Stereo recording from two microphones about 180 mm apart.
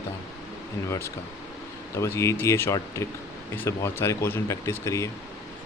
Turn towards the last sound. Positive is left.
turn(degrees=15)  # may be behind; listen again after turning